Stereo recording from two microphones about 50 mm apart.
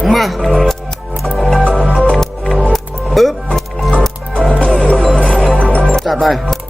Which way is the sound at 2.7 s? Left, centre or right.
Centre.